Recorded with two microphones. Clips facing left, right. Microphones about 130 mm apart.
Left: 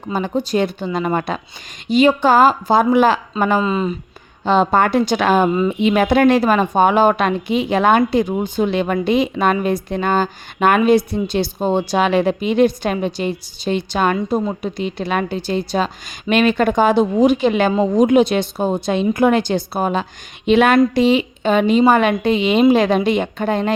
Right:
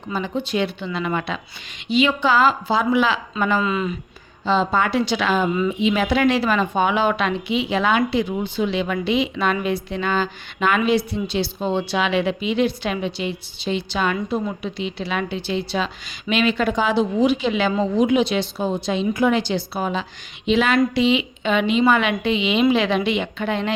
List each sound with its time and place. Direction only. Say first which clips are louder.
0.1 s a woman's voice: left 5 dB; 45° left (ahead or behind)
3.6 s speech: left 4 dB; 30° left (ahead or behind)
4.4 s a woman's voice: left 5 dB; 55° left (ahead or behind)